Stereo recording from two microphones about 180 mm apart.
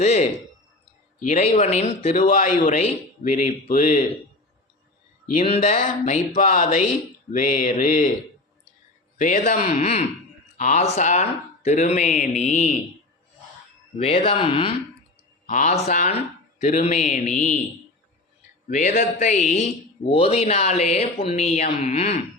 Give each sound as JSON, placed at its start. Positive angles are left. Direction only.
{"t": 0.0, "sound": "speech", "side_deg": 35}
{"t": 2.1, "sound": "speech", "side_deg": 45}
{"t": 5.4, "sound": "speech", "side_deg": 40}
{"t": 9.1, "sound": "speech", "side_deg": 45}
{"t": 13.9, "sound": "speech", "side_deg": 35}
{"t": 15.4, "sound": "speech", "side_deg": 45}
{"t": 18.7, "sound": "speech", "side_deg": 40}